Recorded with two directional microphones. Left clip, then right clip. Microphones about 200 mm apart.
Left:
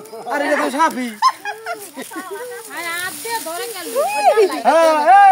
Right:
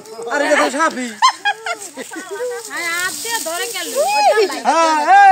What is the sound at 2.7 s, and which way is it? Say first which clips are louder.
Speech: right 2 dB; 45° right (ahead or behind).